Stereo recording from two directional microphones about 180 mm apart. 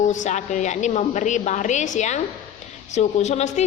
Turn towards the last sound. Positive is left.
turn(degrees=40)  # may be behind; listen again after turning